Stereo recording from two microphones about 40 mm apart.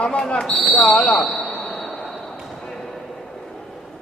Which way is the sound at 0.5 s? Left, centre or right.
Centre.